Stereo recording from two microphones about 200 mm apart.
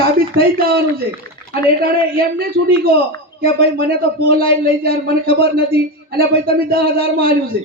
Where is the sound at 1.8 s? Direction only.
50° right (ahead or behind).